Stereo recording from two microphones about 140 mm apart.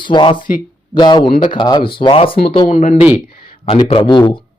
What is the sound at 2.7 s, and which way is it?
Speech, 60° left (ahead or behind).